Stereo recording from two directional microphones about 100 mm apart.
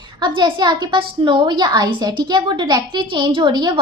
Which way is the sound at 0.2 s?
50° right (ahead or behind).